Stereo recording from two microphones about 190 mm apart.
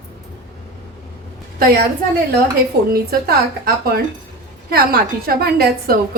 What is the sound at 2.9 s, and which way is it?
A woman's voice, 55° right (ahead or behind).